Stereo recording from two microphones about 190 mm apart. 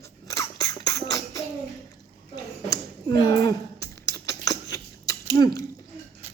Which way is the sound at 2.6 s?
20° left (ahead or behind).